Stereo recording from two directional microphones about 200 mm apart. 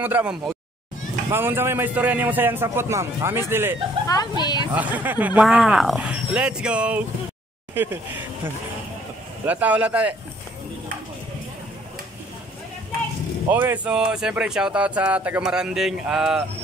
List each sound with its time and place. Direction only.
0.0 s a man's voice: 10° right (ahead or behind)
4.1 s speech: 20° left (ahead or behind)
4.7 s speech: 10° right (ahead or behind)
9.5 s a man's voice: 10° right (ahead or behind)
13.5 s speech: 10° right (ahead or behind)